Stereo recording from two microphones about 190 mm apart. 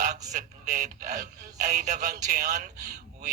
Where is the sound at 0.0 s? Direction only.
40° right (ahead or behind).